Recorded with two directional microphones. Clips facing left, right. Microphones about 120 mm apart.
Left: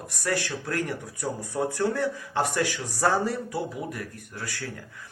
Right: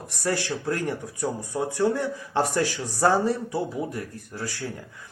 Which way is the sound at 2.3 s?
30° right (ahead or behind).